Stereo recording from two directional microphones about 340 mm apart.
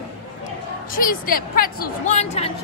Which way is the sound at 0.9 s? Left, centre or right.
Left.